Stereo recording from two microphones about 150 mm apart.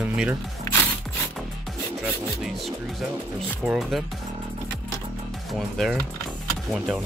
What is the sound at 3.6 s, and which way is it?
Speech, centre (ahead or behind).